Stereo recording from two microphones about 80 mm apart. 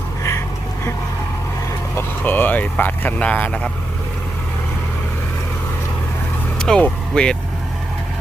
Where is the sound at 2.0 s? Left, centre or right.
Left.